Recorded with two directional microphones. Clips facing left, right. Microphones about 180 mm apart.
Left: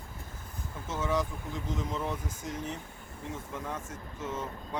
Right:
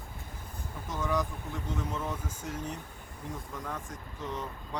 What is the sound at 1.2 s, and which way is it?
Speech, 20° left (ahead or behind).